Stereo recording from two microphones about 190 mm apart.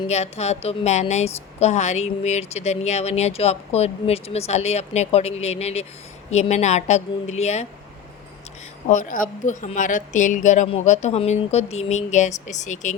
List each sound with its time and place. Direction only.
0.1 s a woman's voice: 35° left (ahead or behind)
8.9 s a woman's voice: 45° left (ahead or behind)